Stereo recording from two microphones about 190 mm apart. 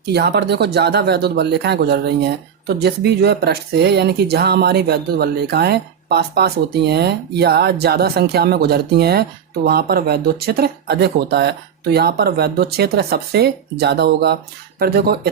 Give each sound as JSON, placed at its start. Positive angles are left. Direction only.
{"t": 0.0, "sound": "speech", "side_deg": -60}